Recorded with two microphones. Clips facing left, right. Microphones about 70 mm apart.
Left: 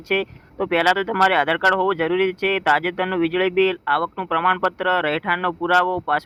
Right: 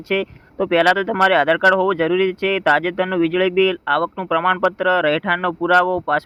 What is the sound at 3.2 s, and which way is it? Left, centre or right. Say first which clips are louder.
Speech: right 2 dB; left.